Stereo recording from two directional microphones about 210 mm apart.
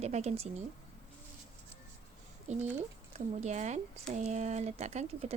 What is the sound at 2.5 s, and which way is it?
Speech, 35° right (ahead or behind).